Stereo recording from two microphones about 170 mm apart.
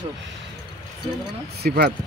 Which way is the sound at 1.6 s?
65° right (ahead or behind).